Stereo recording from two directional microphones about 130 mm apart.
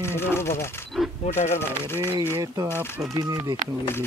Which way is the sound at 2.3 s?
25° right (ahead or behind).